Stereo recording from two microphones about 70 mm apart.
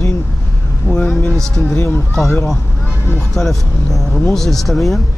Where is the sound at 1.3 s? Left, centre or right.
Centre.